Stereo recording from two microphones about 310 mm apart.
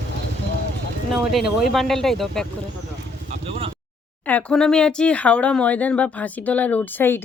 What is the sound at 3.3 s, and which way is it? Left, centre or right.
Vehicle, centre.